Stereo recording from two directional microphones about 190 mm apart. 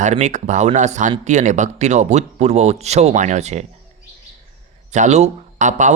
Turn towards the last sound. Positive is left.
turn(degrees=-40)  # may be behind; listen again after turning